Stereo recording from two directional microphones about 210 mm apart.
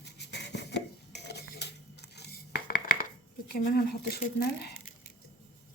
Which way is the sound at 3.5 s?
45° left (ahead or behind).